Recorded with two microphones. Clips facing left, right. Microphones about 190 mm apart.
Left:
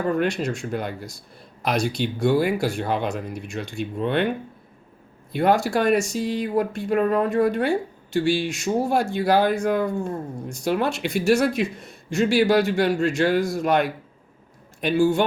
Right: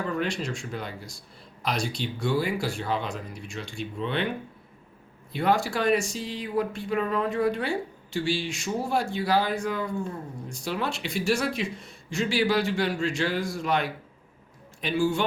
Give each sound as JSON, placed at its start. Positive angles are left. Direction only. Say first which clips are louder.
{"t": 0.0, "sound": "speech", "louder": "left 6 dB", "side_deg": 50}
{"t": 2.2, "sound": "speech", "louder": "left 6 dB", "side_deg": 60}
{"t": 5.3, "sound": "speech", "louder": "left 5 dB", "side_deg": 45}